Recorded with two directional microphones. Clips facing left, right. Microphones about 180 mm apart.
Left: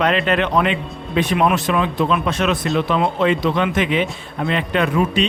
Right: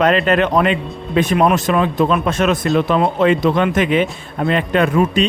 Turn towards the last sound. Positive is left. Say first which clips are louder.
# right 3 dB
turn(degrees=-45)  # may be behind; listen again after turning